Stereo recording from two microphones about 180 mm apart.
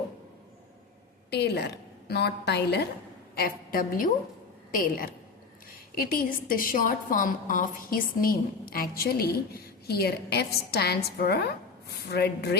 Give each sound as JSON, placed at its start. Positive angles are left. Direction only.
{"t": 1.3, "sound": "a woman's voice", "side_deg": 65}
{"t": 3.3, "sound": "a woman's voice", "side_deg": 55}